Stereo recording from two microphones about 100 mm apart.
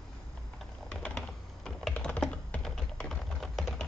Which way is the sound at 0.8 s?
5° left (ahead or behind).